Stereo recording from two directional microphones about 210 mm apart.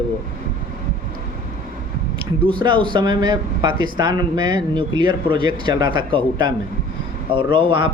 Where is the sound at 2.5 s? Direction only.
25° right (ahead or behind).